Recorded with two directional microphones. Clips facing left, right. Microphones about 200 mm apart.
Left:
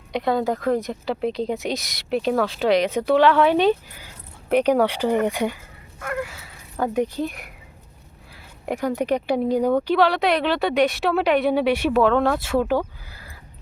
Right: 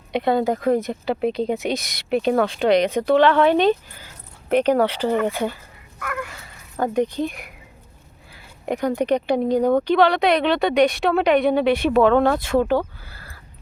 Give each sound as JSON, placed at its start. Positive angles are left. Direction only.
{"t": 0.1, "sound": "speech", "side_deg": 0}
{"t": 6.0, "sound": "a sound", "side_deg": 30}
{"t": 6.4, "sound": "speech", "side_deg": 5}
{"t": 8.6, "sound": "speech", "side_deg": 5}